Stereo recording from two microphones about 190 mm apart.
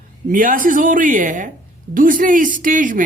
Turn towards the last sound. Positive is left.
turn(degrees=-45)  # may be behind; listen again after turning